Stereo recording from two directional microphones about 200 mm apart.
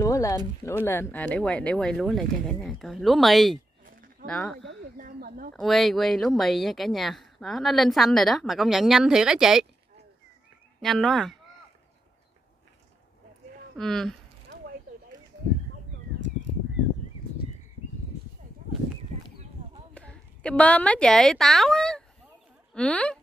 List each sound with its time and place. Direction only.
0.0 s a sound: 15° left (ahead or behind)
0.8 s a woman's voice: 10° left (ahead or behind)
3.8 s a sound: 45° right (ahead or behind)
4.3 s a woman's voice: 5° left (ahead or behind)
4.9 s speech: 45° right (ahead or behind)
5.5 s a woman's voice: centre (ahead or behind)
10.8 s a woman's voice: centre (ahead or behind)
13.7 s a woman's voice: centre (ahead or behind)
19.9 s speech: 5° left (ahead or behind)